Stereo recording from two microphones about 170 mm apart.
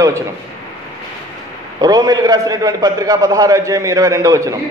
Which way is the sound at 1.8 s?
20° right (ahead or behind).